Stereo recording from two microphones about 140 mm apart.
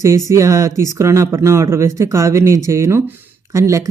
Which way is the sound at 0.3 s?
20° right (ahead or behind).